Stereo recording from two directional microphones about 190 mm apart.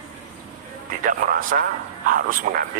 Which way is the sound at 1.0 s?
45° right (ahead or behind).